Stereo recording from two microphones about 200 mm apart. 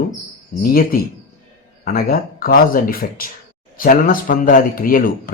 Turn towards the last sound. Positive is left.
turn(degrees=45)  # may be behind; listen again after turning